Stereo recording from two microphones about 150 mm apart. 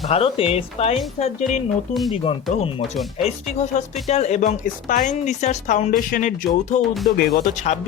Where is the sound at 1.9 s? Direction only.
Centre (ahead or behind).